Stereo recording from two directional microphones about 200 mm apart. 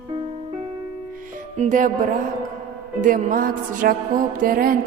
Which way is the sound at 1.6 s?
40° right (ahead or behind).